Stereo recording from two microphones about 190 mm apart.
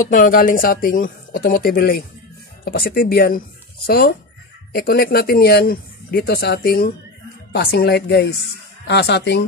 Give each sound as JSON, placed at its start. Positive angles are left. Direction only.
{"t": 0.1, "sound": "speech", "side_deg": 45}